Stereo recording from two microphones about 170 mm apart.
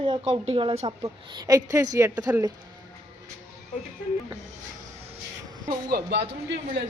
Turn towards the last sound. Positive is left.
turn(degrees=-90)